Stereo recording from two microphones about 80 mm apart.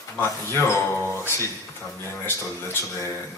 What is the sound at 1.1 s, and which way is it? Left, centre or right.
A man's voice, left.